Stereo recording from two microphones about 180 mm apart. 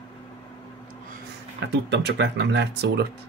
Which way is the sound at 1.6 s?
75° right (ahead or behind).